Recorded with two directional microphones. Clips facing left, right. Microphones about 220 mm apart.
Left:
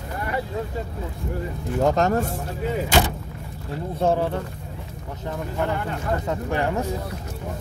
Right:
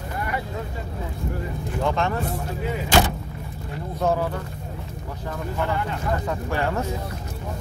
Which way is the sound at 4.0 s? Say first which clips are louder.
Left 2 dB; 30° left (ahead or behind).